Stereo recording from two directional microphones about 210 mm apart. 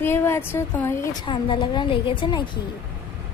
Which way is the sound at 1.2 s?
25° left (ahead or behind).